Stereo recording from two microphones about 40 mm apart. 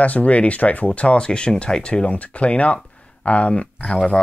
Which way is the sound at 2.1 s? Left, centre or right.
Left.